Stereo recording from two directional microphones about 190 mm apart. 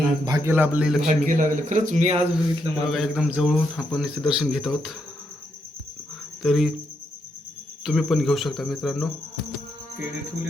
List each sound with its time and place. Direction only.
0.3 s a man's voice: 15° right (ahead or behind)
1.0 s a man's voice: 40° right (ahead or behind)
2.3 s speech: centre (ahead or behind)
6.4 s speech: centre (ahead or behind)
7.9 s speech: centre (ahead or behind)